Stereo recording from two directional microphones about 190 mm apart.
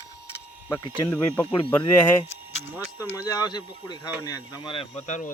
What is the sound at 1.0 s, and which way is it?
Speech, 15° left (ahead or behind).